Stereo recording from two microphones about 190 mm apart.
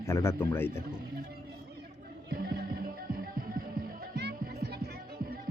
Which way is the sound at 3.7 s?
60° right (ahead or behind).